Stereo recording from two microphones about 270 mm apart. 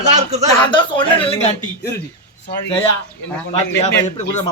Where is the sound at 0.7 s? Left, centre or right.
Centre.